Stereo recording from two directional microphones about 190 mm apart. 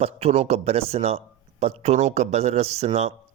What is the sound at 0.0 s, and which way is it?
Speech, 35° right (ahead or behind).